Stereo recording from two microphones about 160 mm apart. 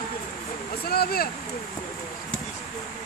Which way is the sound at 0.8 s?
75° left (ahead or behind).